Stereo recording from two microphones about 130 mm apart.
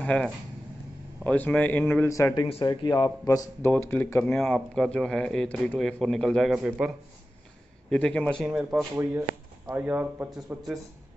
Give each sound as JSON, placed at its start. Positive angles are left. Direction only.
{"t": 0.0, "sound": "a man's voice", "side_deg": 10}
{"t": 2.6, "sound": "speech", "side_deg": 35}
{"t": 4.5, "sound": "speech", "side_deg": 5}
{"t": 7.9, "sound": "a man's voice", "side_deg": 5}
{"t": 8.5, "sound": "speech", "side_deg": -5}